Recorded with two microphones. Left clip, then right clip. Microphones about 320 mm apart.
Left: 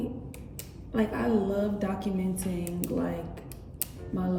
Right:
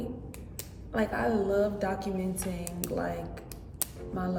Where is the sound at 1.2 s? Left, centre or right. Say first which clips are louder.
Right 3 dB; right.